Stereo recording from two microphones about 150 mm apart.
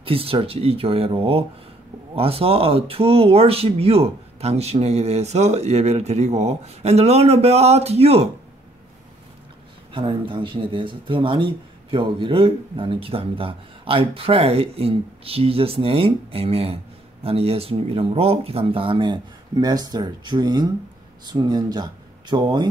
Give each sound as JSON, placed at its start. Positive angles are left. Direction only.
{"t": 0.0, "sound": "speech", "side_deg": -40}
{"t": 9.9, "sound": "speech", "side_deg": -35}